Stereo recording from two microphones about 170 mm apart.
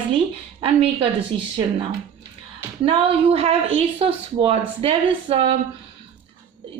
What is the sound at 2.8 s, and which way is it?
A woman's voice, 35° right (ahead or behind).